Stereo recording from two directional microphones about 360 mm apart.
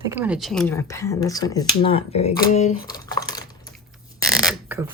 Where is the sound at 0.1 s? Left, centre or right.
Centre.